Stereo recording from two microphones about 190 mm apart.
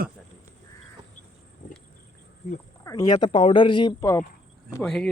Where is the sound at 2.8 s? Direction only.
20° left (ahead or behind).